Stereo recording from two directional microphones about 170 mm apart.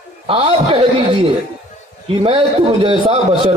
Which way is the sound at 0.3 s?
30° right (ahead or behind).